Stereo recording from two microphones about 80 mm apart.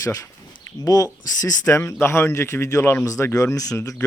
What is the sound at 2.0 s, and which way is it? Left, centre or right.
Speech, left.